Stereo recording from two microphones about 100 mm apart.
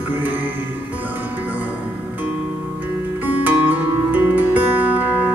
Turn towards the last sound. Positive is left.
turn(degrees=-15)  # may be behind; listen again after turning